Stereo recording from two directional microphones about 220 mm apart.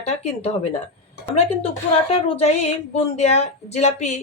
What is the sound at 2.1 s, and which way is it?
Speech, 30° left (ahead or behind).